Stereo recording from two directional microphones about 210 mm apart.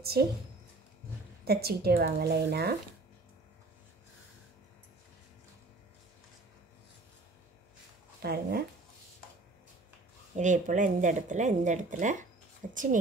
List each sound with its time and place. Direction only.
1.4 s a woman's voice: 50° right (ahead or behind)
8.2 s speech: 50° right (ahead or behind)
10.3 s speech: 35° right (ahead or behind)